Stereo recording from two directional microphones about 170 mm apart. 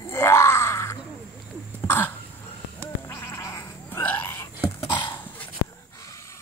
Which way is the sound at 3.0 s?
15° left (ahead or behind).